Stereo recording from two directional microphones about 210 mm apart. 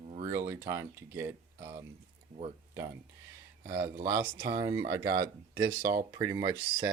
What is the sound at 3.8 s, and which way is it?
Speech, 15° right (ahead or behind).